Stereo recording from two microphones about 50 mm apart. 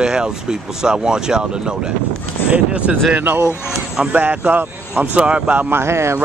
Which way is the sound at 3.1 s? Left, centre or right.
Right.